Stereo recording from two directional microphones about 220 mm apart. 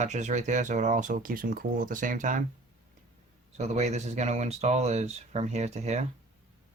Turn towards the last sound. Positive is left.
turn(degrees=-30)  # may be behind; listen again after turning